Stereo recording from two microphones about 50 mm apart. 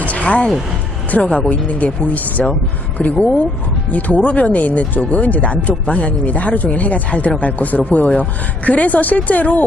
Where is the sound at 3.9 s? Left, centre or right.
Left.